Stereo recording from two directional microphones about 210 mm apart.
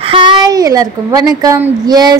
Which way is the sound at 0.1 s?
25° right (ahead or behind).